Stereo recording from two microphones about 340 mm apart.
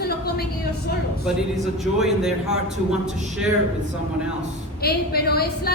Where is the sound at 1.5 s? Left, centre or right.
Centre.